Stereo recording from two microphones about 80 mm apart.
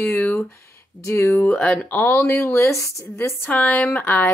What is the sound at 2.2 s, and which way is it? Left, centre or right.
Speech, left.